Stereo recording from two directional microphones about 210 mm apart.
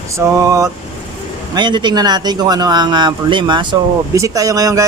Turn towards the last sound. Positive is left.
turn(degrees=-15)  # may be behind; listen again after turning